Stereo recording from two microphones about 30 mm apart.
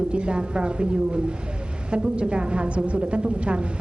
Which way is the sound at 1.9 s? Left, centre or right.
Right.